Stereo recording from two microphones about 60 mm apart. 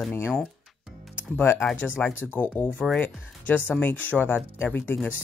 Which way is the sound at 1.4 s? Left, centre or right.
Left.